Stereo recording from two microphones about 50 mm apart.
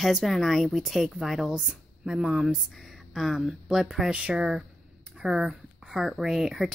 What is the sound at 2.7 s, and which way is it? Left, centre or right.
Speech, centre.